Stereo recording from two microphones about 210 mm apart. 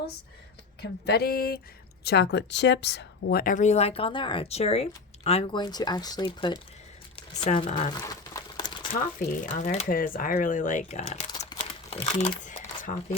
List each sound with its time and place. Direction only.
0.8 s a sound: 50° left (ahead or behind)
2.0 s speech: 50° left (ahead or behind); by 6.6 s 20° left (ahead or behind)
7.4 s speech: 30° left (ahead or behind)
8.0 s crumpling: 15° left (ahead or behind)
8.9 s speech: 40° left (ahead or behind)
11.3 s a sound: 20° left (ahead or behind); by 13.1 s 40° left (ahead or behind)